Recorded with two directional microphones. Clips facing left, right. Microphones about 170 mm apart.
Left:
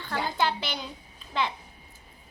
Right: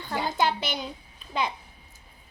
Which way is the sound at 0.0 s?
15° right (ahead or behind).